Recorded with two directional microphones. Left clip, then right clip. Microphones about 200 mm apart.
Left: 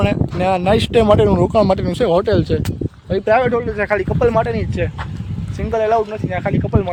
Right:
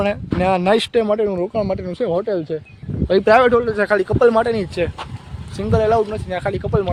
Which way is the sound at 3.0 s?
45° right (ahead or behind).